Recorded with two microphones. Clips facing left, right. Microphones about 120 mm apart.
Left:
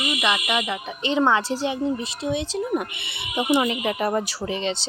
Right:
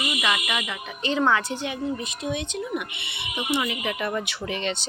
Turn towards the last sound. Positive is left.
turn(degrees=30)  # may be behind; listen again after turning